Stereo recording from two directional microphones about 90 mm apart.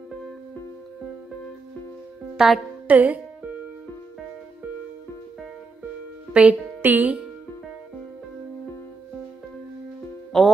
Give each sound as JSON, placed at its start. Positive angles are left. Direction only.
{"t": 2.3, "sound": "speech", "side_deg": -5}
{"t": 2.9, "sound": "speech", "side_deg": -20}
{"t": 6.3, "sound": "speech", "side_deg": -15}
{"t": 10.3, "sound": "speech", "side_deg": 5}